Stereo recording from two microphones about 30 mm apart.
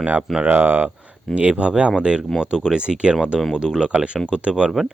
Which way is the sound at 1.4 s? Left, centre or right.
Right.